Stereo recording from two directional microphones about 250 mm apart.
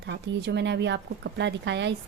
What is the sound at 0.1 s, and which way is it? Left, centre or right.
Speech, right.